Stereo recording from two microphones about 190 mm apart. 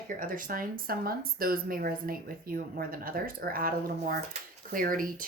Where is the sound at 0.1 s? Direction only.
45° right (ahead or behind).